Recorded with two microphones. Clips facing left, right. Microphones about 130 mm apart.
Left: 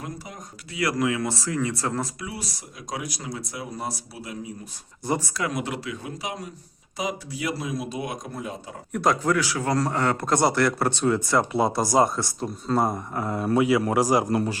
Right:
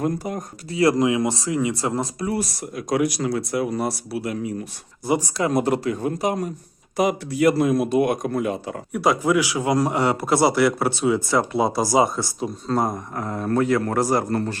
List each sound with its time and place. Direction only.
0.0 s speech: 50° right (ahead or behind)
0.7 s speech: 30° right (ahead or behind)
2.2 s speech: 55° right (ahead or behind)
5.4 s a man's voice: 40° right (ahead or behind); by 8.7 s 70° right (ahead or behind)
8.9 s a man's voice: 5° right (ahead or behind)